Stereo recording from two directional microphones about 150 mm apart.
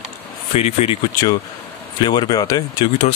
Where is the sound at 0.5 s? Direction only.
45° left (ahead or behind).